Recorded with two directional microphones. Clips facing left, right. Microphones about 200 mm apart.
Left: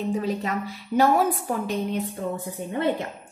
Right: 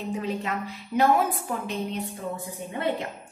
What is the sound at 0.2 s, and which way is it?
Speech, 40° left (ahead or behind).